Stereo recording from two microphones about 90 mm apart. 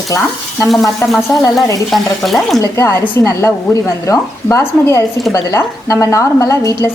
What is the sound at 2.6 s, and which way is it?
A woman's voice, 35° left (ahead or behind).